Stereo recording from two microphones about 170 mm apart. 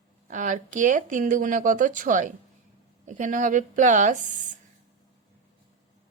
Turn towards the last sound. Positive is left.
turn(degrees=-45)  # may be behind; listen again after turning